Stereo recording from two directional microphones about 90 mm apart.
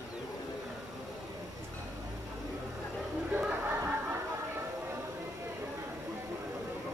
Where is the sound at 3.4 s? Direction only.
15° right (ahead or behind).